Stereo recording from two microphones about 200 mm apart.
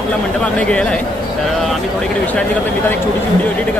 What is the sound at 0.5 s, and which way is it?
Speech, 5° left (ahead or behind).